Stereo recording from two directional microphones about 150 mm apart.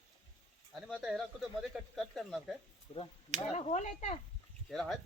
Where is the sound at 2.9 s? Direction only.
40° left (ahead or behind).